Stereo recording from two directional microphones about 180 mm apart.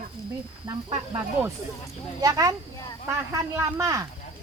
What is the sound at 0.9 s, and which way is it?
Speech, 15° right (ahead or behind).